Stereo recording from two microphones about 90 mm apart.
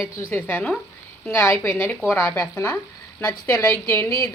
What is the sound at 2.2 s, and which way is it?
A woman's voice, 10° left (ahead or behind).